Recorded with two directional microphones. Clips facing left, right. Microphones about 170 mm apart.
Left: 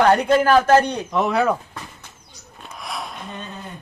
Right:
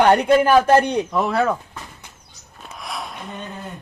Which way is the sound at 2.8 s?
Centre (ahead or behind).